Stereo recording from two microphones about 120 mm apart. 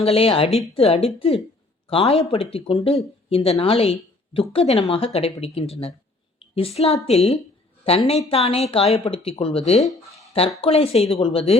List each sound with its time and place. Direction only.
0.0 s speech: 55° left (ahead or behind)
9.8 s speech: centre (ahead or behind)
10.6 s speech: 55° left (ahead or behind)